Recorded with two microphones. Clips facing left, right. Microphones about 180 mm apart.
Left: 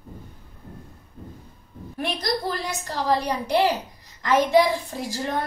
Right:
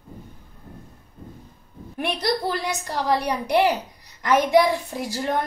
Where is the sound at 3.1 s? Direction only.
15° right (ahead or behind).